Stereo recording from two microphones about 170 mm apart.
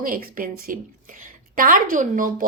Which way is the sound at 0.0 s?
55° right (ahead or behind).